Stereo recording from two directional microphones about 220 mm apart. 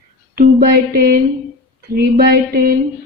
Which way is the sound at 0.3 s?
45° right (ahead or behind).